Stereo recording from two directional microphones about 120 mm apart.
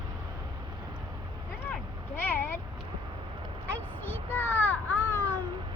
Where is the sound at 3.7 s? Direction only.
15° left (ahead or behind).